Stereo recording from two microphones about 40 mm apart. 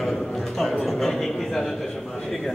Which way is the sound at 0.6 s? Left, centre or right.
Centre.